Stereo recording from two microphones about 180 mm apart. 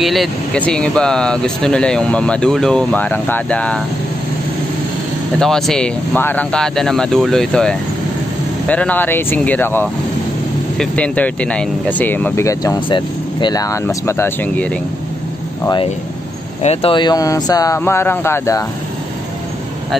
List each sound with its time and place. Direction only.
0.0 s speech: centre (ahead or behind)
5.4 s speech: 5° left (ahead or behind)
16.6 s speech: 30° left (ahead or behind)